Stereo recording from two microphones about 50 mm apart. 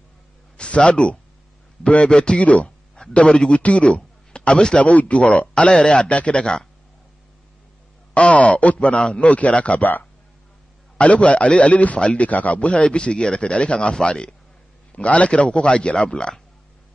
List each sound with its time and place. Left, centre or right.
0.6 s a man's voice: left
4.8 s a man's voice: left
8.1 s a man's voice: left
11.0 s a man's voice: left